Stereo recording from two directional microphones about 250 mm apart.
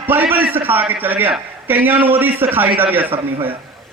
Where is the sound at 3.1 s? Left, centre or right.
Right.